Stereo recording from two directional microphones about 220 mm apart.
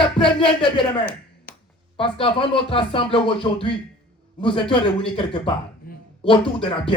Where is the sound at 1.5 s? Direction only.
45° left (ahead or behind).